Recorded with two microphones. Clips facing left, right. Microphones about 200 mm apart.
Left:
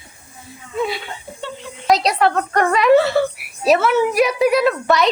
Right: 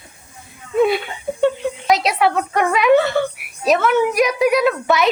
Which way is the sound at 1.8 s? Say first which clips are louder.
Left 1 dB; centre (ahead or behind).